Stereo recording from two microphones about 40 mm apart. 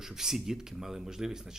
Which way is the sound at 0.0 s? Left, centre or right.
Centre.